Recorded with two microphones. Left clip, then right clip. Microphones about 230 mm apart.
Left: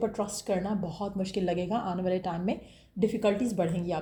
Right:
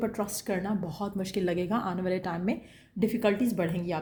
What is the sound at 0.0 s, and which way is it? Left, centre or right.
Speech, right.